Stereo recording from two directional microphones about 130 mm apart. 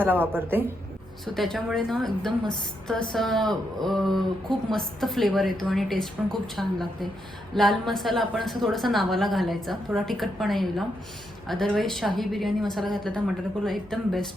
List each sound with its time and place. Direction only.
0.0 s a woman's voice: 15° right (ahead or behind)
1.2 s a woman's voice: centre (ahead or behind)